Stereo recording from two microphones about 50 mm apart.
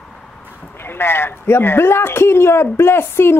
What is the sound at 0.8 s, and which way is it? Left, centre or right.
Speech, left.